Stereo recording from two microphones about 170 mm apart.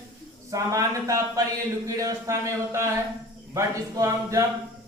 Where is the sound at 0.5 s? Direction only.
20° right (ahead or behind).